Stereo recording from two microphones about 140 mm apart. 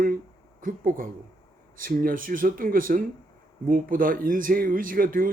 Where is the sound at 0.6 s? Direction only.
85° right.